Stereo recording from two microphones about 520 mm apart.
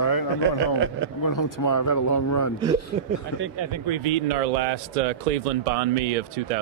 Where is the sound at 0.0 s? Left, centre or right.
Left.